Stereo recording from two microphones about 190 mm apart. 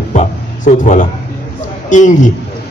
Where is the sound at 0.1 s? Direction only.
40° left (ahead or behind).